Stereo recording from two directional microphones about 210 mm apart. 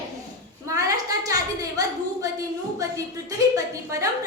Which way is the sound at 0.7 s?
15° right (ahead or behind).